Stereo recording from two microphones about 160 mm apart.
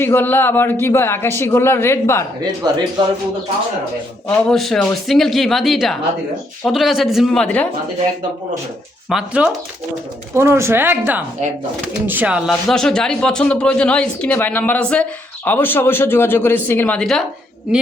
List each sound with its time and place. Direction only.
0.0 s speech: 15° left (ahead or behind)
4.3 s speech: 5° left (ahead or behind)
9.0 s speech: 5° right (ahead or behind)
10.3 s speech: 15° right (ahead or behind); by 17.2 s 5° left (ahead or behind)